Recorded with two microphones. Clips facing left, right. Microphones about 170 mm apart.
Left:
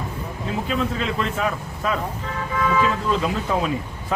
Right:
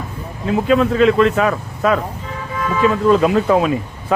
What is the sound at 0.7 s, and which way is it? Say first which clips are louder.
Speech: right 13 dB; 70° right (ahead or behind).